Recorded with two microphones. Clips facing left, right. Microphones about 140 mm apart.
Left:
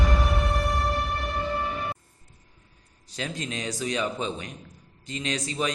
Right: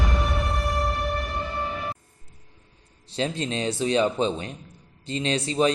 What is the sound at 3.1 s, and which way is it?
A man's voice, 30° right (ahead or behind).